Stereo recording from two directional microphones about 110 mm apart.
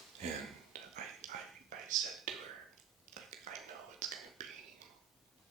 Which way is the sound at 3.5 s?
90° right.